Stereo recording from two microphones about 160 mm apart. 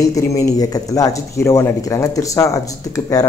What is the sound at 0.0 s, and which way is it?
Speech, 20° left (ahead or behind).